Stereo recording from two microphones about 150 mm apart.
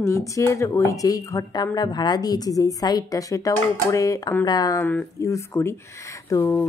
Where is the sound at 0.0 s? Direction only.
20° left (ahead or behind).